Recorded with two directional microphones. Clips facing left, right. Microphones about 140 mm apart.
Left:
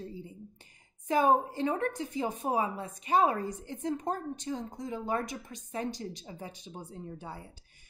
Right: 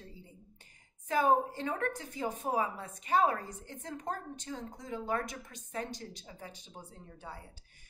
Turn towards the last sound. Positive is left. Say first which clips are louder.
# left 6 dB
turn(degrees=20)  # may be behind; listen again after turning